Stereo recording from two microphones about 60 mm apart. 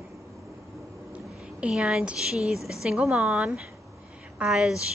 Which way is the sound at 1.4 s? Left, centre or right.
Centre.